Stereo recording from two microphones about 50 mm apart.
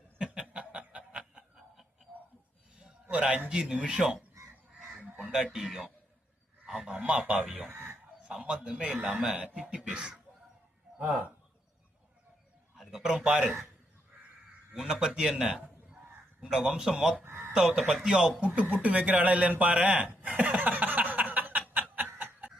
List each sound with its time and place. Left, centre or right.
0.2 s chuckle: centre
0.5 s snicker: right
2.7 s a sound: right
3.5 s speech: right
5.2 s a man's voice: centre
6.9 s a man's voice: right
12.8 s a sound: centre
13.1 s speech: centre
14.8 s a man's voice: centre
17.2 s a sound: right
17.5 s speech: centre
18.6 s speech: right
20.6 s a sound: right